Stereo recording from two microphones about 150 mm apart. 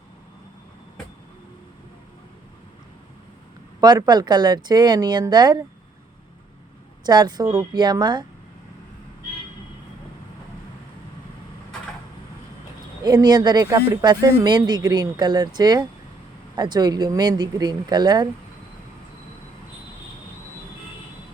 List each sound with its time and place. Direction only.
3.8 s speech: 25° right (ahead or behind)
7.0 s speech: 30° right (ahead or behind)
13.2 s speech: 30° right (ahead or behind)